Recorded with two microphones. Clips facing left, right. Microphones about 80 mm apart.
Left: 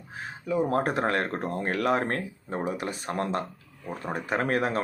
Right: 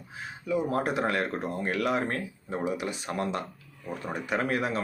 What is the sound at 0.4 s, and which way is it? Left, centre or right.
Speech, left.